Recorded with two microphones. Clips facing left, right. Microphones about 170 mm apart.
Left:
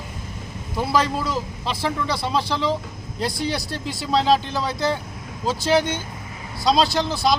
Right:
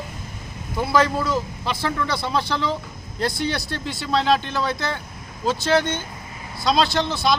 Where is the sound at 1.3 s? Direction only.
30° left (ahead or behind).